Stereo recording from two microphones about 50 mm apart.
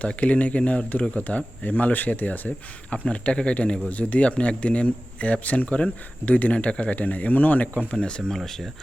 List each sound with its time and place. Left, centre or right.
0.0 s a man's voice: left
8.4 s speech: centre